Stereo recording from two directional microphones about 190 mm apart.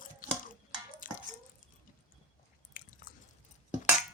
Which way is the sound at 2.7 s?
45° left (ahead or behind).